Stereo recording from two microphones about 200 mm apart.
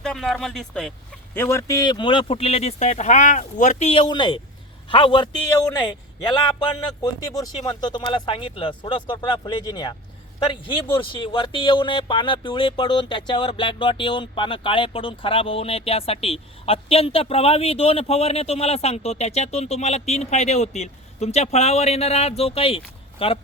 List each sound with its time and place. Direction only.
0.0 s speech: centre (ahead or behind); by 23.4 s 30° left (ahead or behind)